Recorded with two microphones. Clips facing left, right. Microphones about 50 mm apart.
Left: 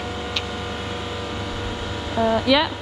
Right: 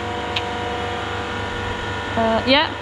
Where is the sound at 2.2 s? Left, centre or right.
Right.